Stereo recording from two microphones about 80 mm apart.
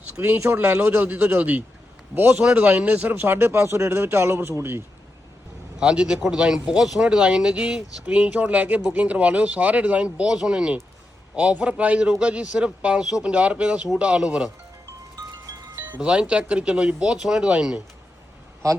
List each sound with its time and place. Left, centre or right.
0.2 s speech: right
5.8 s speech: centre
15.1 s chime: right
16.0 s speech: centre
18.6 s a man's voice: right